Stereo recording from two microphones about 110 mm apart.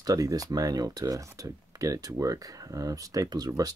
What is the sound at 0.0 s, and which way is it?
Speech, 30° right (ahead or behind).